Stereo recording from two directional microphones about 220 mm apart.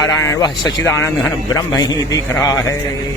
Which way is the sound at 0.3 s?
15° left (ahead or behind).